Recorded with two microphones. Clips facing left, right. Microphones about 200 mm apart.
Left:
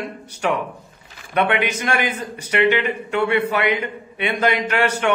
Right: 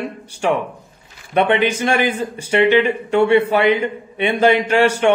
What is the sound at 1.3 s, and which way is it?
A man's voice, 30° right (ahead or behind).